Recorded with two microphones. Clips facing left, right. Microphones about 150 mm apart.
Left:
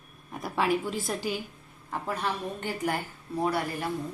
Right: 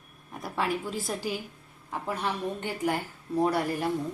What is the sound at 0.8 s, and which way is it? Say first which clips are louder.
Speech: left 1 dB; centre (ahead or behind).